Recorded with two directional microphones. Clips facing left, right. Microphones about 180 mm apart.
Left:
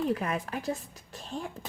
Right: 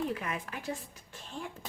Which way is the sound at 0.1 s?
40° left (ahead or behind).